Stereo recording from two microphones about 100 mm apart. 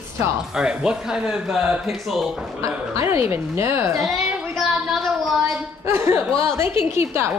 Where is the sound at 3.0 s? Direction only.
20° right (ahead or behind).